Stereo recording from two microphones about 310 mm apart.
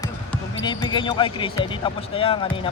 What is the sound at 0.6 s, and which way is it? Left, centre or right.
Speech, centre.